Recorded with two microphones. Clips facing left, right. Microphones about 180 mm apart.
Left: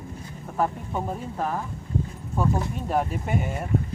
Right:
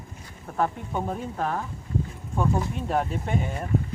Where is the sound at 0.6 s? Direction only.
5° left (ahead or behind).